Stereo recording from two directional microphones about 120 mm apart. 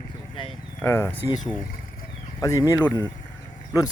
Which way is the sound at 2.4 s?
25° left (ahead or behind).